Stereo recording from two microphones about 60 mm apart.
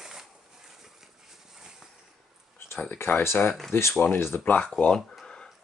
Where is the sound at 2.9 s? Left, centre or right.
Left.